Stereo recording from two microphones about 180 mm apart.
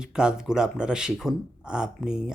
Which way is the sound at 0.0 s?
5° right (ahead or behind).